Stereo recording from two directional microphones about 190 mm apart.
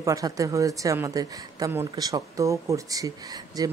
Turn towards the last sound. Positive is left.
turn(degrees=-20)  # may be behind; listen again after turning